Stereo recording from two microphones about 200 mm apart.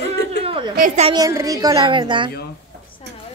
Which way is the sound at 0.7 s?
35° right (ahead or behind).